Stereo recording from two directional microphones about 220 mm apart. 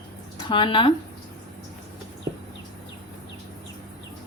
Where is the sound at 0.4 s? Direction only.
20° left (ahead or behind).